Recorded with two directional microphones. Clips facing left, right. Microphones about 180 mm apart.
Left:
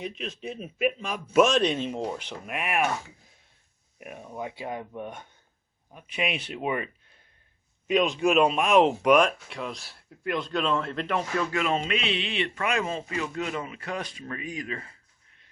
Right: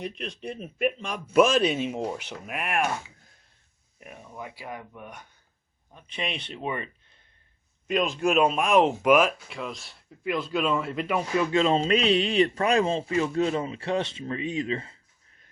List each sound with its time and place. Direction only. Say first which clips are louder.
0.0 s speech: even; centre (ahead or behind)
4.0 s speech: left 4 dB; 15° left (ahead or behind)
5.9 s speech: left 3 dB; 10° left (ahead or behind); by 11.4 s 10° right (ahead or behind)
11.5 s speech: right 8 dB; 30° right (ahead or behind)